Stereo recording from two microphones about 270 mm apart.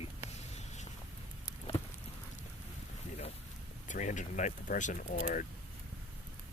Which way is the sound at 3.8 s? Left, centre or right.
Left.